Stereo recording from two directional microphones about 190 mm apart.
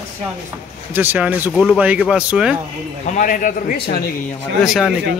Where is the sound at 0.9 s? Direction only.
10° right (ahead or behind).